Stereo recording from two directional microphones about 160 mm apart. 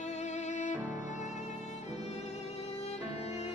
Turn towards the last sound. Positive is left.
turn(degrees=40)  # may be behind; listen again after turning